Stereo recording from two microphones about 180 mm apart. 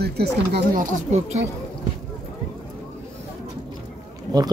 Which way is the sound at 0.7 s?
45° right (ahead or behind).